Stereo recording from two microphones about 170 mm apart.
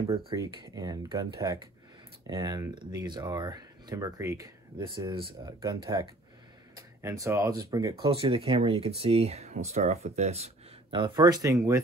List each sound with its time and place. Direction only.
0.3 s speech: 25° right (ahead or behind)
4.7 s speech: 30° right (ahead or behind)
8.0 s speech: 30° right (ahead or behind)